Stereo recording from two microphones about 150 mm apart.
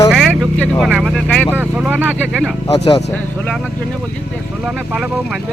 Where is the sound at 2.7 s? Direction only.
45° left (ahead or behind).